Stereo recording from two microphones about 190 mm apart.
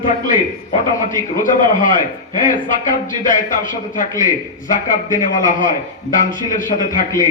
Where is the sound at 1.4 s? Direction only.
45° left (ahead or behind).